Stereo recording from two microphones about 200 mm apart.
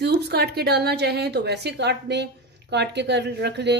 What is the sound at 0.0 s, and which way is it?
Speech, 55° right (ahead or behind).